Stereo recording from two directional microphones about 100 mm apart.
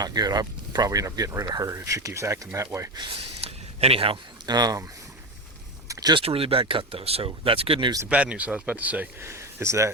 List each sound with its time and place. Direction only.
0.0 s speech: 40° right (ahead or behind)
3.2 s a sound: 85° right
4.4 s speech: 40° right (ahead or behind)
5.9 s a sound: 40° right (ahead or behind)
6.1 s speech: 70° right (ahead or behind)
8.1 s speech: 15° right (ahead or behind)
9.2 s speech: 30° right (ahead or behind)